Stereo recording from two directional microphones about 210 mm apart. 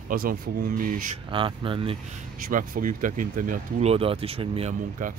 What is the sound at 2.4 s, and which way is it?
Speech, 40° right (ahead or behind).